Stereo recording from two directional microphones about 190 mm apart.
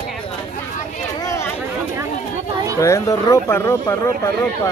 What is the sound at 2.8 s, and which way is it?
Speech, 15° left (ahead or behind).